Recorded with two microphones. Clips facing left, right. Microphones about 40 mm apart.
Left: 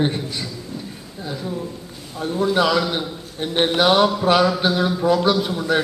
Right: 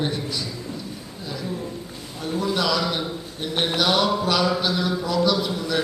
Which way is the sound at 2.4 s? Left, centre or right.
Left.